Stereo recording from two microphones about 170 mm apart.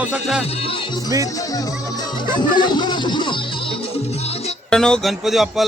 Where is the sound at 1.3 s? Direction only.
20° left (ahead or behind); by 4.5 s 40° left (ahead or behind).